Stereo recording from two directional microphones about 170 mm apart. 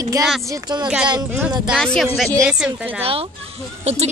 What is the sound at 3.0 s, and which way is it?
Speech, 35° right (ahead or behind).